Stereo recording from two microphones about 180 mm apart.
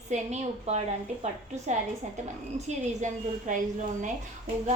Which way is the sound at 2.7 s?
45° right (ahead or behind).